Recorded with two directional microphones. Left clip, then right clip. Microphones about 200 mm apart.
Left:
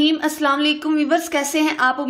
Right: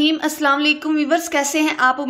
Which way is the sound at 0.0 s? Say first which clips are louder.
Right 1 dB; 5° right (ahead or behind).